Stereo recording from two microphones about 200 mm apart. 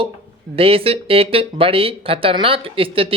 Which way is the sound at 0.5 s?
30° right (ahead or behind).